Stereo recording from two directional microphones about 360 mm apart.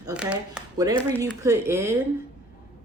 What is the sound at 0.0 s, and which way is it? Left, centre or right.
A woman's voice, centre.